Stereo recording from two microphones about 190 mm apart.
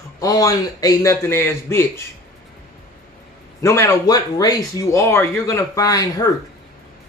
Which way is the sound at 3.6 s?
15° left (ahead or behind).